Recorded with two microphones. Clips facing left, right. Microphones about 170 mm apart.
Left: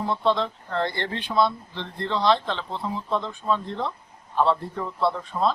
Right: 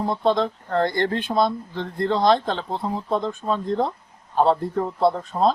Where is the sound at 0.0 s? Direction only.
40° right (ahead or behind).